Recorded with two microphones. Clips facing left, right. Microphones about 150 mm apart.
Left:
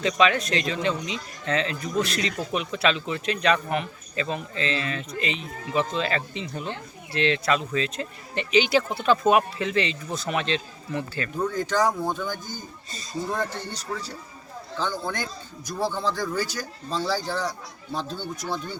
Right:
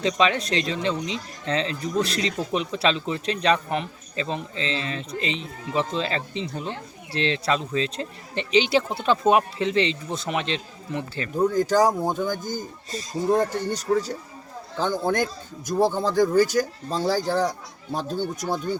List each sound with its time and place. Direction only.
0.0 s speech: 30° right (ahead or behind)
11.3 s a man's voice: 40° right (ahead or behind)